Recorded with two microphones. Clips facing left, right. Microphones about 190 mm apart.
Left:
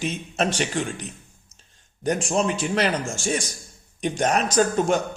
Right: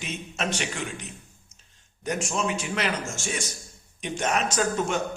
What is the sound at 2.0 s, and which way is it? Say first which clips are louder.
A man's voice: left 5 dB; 35° left (ahead or behind).